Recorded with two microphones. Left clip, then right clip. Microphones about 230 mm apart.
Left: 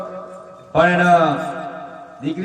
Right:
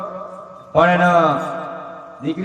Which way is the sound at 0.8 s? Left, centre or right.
Right.